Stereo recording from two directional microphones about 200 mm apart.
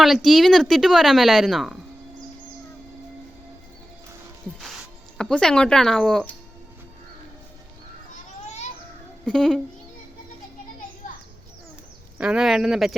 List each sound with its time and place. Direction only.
0.0 s speech: centre (ahead or behind)
4.6 s speech: centre (ahead or behind)
9.2 s speech: centre (ahead or behind)
12.1 s speech: 5° right (ahead or behind)